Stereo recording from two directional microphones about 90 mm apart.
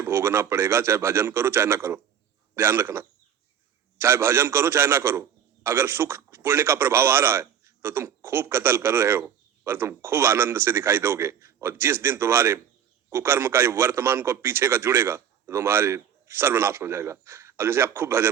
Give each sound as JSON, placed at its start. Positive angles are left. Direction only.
{"t": 0.0, "sound": "a man's voice", "side_deg": -30}